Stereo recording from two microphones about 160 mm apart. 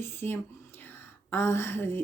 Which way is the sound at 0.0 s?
15° left (ahead or behind).